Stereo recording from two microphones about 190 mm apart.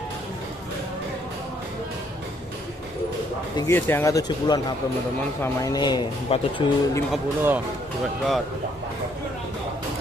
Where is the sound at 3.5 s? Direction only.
15° left (ahead or behind).